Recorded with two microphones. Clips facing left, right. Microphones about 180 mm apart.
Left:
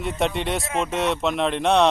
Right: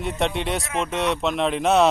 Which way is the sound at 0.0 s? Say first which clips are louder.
Even; centre (ahead or behind).